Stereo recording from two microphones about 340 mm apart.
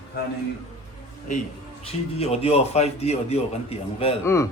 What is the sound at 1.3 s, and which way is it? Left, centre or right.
A man's voice, left.